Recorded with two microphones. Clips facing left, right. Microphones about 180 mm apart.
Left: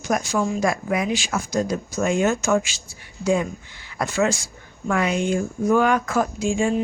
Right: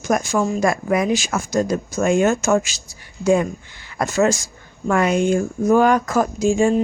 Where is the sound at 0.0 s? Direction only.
50° right (ahead or behind).